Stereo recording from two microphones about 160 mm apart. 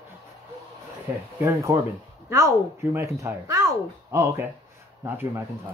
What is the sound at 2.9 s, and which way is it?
A woman's voice, 15° right (ahead or behind).